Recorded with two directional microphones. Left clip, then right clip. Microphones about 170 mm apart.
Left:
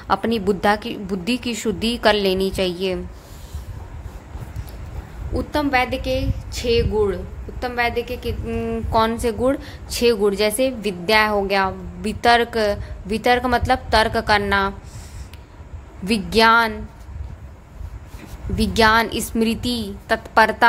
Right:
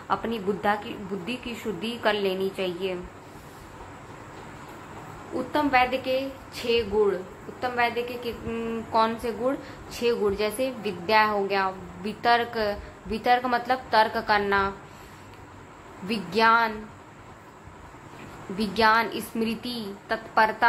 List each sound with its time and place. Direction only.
0.1 s a woman's voice: 65° left (ahead or behind)
5.3 s a woman's voice: 55° left (ahead or behind)
16.1 s a woman's voice: 55° left (ahead or behind)
18.6 s a woman's voice: 55° left (ahead or behind)